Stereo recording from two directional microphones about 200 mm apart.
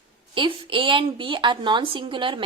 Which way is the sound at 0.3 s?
25° right (ahead or behind).